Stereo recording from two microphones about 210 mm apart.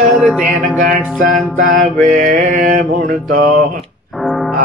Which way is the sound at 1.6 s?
45° right (ahead or behind).